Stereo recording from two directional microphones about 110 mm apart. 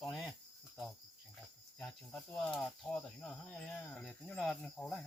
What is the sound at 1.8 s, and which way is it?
Speech, 5° left (ahead or behind).